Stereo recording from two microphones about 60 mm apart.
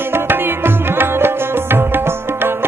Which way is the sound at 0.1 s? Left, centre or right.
Right.